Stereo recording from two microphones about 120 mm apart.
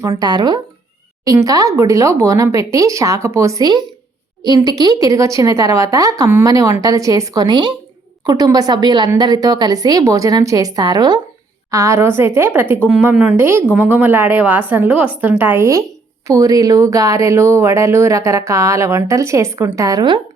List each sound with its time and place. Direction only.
0.2 s a woman's voice: 35° right (ahead or behind)
11.7 s a woman's voice: 25° right (ahead or behind); by 20.2 s 40° right (ahead or behind)